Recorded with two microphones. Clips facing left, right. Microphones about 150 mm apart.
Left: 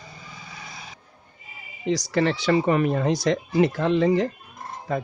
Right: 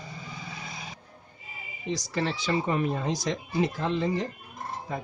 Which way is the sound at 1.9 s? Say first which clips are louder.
Left 7 dB; 75° left (ahead or behind).